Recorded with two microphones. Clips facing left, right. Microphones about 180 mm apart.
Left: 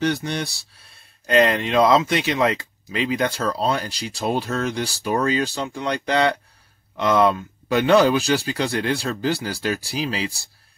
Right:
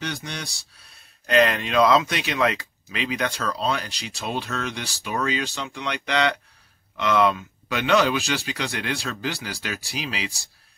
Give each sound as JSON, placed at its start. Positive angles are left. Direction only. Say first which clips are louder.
{"t": 0.0, "sound": "speech", "louder": "left 10 dB", "side_deg": 35}
{"t": 1.3, "sound": "speech", "louder": "left 2 dB", "side_deg": 25}